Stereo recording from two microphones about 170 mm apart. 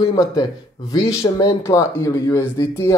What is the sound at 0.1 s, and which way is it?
Speech, 25° left (ahead or behind).